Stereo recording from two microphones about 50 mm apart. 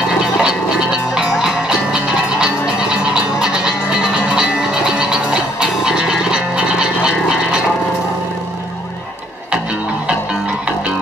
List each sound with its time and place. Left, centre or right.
1.1 s music: centre